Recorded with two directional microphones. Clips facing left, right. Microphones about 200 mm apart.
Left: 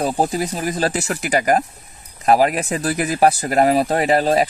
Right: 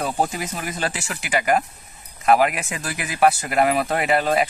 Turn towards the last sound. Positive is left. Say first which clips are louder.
# left 4 dB
turn(degrees=35)  # may be behind; listen again after turning